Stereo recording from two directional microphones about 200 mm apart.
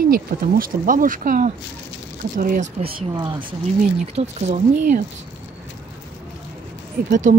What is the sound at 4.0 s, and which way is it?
Speech, 35° right (ahead or behind).